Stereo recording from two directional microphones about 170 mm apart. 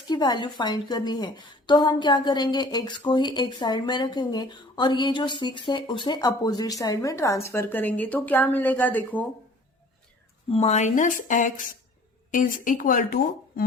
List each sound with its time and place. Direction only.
0.1 s a woman's voice: 25° left (ahead or behind); by 9.2 s 10° left (ahead or behind)
10.5 s speech: 40° left (ahead or behind); by 13.7 s 55° left (ahead or behind)